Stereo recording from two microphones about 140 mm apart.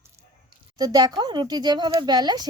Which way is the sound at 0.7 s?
30° right (ahead or behind).